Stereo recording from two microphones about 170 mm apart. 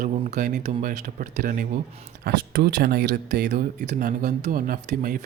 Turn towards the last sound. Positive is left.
turn(degrees=-55)  # may be behind; listen again after turning